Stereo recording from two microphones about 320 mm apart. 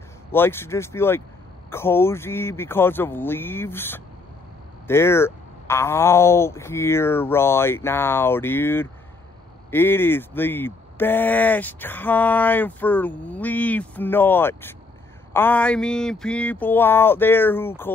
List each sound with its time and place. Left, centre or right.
0.3 s speech: centre